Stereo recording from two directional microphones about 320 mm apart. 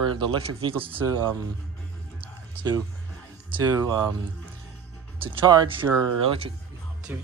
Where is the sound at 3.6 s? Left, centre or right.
Centre.